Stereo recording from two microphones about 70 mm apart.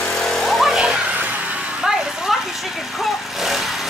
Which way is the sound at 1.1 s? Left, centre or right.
Right.